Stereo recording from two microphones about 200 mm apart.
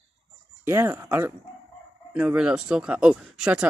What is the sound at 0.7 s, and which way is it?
Speech, 15° right (ahead or behind).